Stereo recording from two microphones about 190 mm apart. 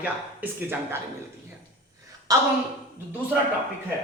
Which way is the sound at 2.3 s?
20° right (ahead or behind).